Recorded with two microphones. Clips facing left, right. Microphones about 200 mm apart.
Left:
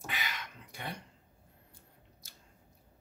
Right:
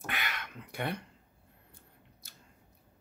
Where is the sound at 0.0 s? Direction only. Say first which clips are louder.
Right 2 dB; 60° right (ahead or behind).